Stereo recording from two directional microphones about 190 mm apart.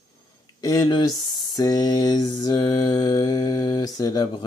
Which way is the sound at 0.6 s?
20° left (ahead or behind).